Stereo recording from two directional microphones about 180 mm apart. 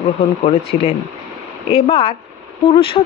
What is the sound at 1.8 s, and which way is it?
Speech, 30° left (ahead or behind).